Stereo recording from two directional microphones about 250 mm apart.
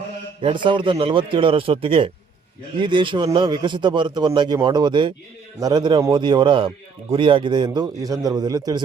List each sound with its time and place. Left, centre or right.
0.4 s a man's voice: centre